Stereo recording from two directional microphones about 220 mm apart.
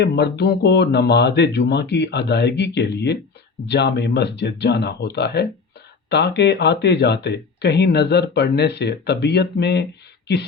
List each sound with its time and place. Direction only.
0.0 s speech: 50° left (ahead or behind)